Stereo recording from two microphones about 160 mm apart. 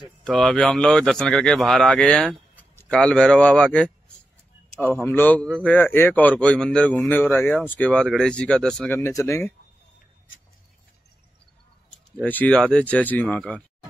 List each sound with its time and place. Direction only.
0.2 s speech: 5° left (ahead or behind)
5.0 s a man's voice: 10° left (ahead or behind)
9.0 s speech: 20° left (ahead or behind)
11.9 s a man's voice: 10° left (ahead or behind)